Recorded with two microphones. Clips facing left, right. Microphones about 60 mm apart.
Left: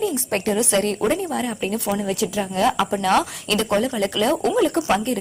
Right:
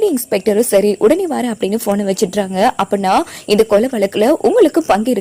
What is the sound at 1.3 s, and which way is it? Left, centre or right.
A woman's voice, right.